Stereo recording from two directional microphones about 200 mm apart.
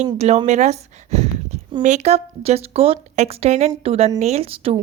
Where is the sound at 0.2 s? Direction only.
35° right (ahead or behind).